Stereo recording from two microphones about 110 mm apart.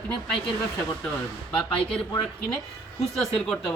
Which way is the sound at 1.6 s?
5° left (ahead or behind).